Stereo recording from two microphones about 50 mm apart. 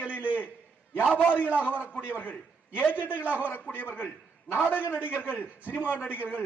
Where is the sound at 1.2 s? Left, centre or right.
Left.